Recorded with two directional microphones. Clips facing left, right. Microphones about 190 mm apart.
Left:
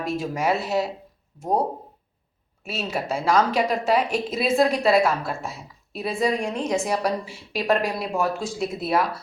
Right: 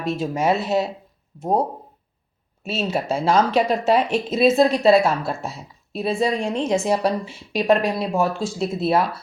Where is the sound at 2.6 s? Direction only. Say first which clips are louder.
Right 4 dB; 25° right (ahead or behind).